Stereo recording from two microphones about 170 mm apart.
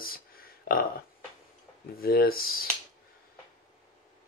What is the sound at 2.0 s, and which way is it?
Speech, 60° left (ahead or behind).